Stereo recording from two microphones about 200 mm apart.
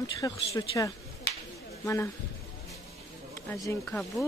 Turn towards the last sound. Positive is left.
turn(degrees=0)  # may be behind; listen again after turning